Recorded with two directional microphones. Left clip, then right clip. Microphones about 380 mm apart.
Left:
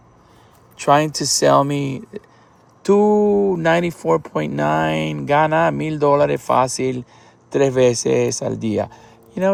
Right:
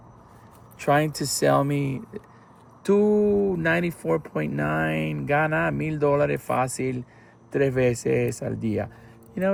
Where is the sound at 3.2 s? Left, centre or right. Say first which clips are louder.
Left 6 dB; left.